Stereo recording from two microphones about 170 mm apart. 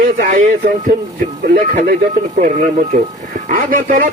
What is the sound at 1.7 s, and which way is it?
A man's voice, 50° right (ahead or behind).